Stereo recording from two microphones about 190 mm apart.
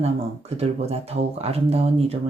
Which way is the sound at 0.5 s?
35° right (ahead or behind).